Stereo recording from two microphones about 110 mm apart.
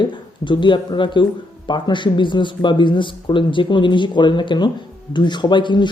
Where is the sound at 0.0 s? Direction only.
45° left (ahead or behind).